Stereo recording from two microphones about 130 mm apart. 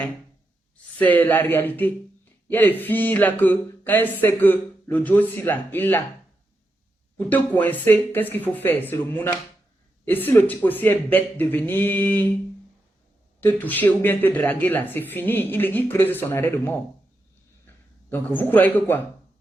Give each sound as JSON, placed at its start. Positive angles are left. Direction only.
{"t": 0.9, "sound": "speech", "side_deg": 10}
{"t": 7.2, "sound": "speech", "side_deg": 15}
{"t": 13.4, "sound": "speech", "side_deg": 15}
{"t": 18.1, "sound": "speech", "side_deg": 15}